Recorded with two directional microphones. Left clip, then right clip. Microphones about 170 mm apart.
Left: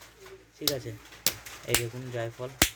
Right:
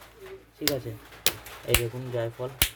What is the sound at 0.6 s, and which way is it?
Speech, centre (ahead or behind).